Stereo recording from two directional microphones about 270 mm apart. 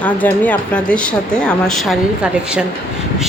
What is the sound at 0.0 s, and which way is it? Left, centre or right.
Speech, centre.